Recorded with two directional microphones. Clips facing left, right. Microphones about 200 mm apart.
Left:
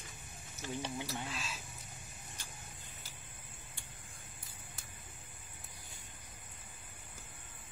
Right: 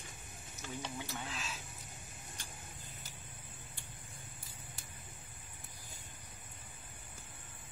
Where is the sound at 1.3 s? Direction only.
Centre (ahead or behind).